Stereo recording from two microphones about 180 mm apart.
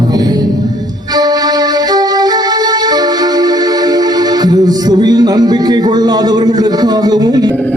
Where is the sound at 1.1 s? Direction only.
20° right (ahead or behind).